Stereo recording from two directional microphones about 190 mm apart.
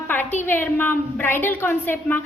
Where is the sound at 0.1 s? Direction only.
10° left (ahead or behind).